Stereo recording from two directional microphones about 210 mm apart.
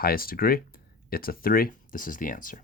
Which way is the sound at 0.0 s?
45° left (ahead or behind).